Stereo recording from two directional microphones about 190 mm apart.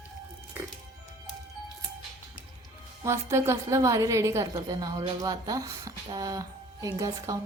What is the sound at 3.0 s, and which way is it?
A woman's voice, 15° right (ahead or behind).